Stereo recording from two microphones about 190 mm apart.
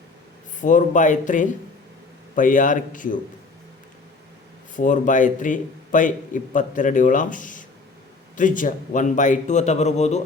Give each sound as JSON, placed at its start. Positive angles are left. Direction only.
{"t": 0.6, "sound": "a man's voice", "side_deg": 40}
{"t": 4.8, "sound": "a man's voice", "side_deg": 40}